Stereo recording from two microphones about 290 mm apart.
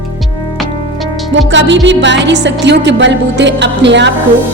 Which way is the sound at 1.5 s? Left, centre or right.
Right.